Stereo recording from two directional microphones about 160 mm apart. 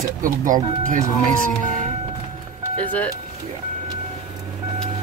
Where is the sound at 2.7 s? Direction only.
10° left (ahead or behind).